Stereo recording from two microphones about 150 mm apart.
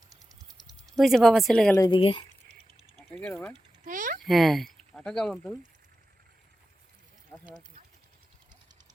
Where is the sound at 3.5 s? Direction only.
60° right (ahead or behind).